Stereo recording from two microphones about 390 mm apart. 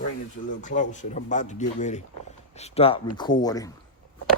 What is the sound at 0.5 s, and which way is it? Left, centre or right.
Speech, centre.